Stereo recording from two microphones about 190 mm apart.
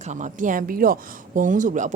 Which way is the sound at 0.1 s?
40° right (ahead or behind).